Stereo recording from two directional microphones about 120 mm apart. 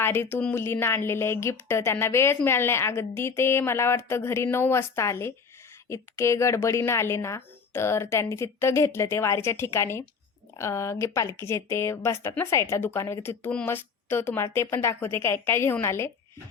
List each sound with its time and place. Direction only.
0.0 s a woman's voice: 20° left (ahead or behind)